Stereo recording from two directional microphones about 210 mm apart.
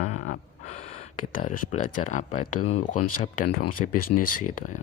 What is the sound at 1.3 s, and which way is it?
Speech, 35° left (ahead or behind).